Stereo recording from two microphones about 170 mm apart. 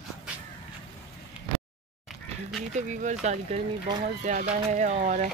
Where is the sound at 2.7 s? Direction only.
45° right (ahead or behind).